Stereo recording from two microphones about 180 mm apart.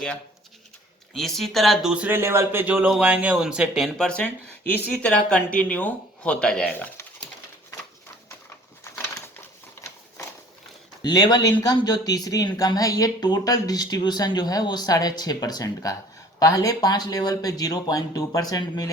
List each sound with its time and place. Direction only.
1.1 s speech: centre (ahead or behind)
8.8 s a sound: 15° left (ahead or behind)
11.0 s speech: 25° left (ahead or behind)